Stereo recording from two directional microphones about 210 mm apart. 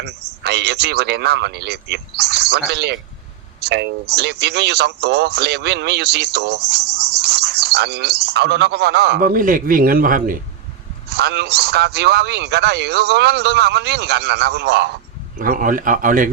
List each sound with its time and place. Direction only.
0.0 s a man's voice: 50° right (ahead or behind)
11.1 s a man's voice: 50° right (ahead or behind)
15.4 s speech: 40° right (ahead or behind)